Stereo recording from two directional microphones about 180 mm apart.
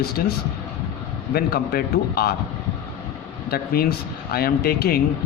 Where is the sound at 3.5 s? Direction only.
60° left (ahead or behind).